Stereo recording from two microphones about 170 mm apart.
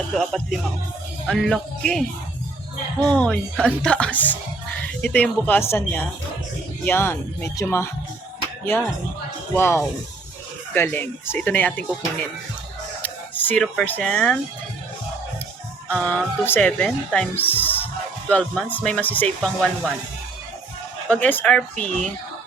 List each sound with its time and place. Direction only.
0.1 s speech: centre (ahead or behind)
3.1 s speech: 5° left (ahead or behind)
9.6 s speech: 15° left (ahead or behind)
13.0 s speech: 10° left (ahead or behind)
15.9 s speech: 5° left (ahead or behind)
21.1 s speech: 10° left (ahead or behind)